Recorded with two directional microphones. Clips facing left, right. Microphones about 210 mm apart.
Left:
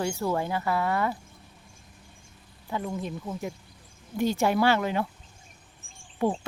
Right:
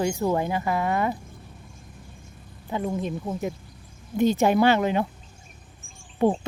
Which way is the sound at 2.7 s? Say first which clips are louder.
Right 4 dB; 20° right (ahead or behind).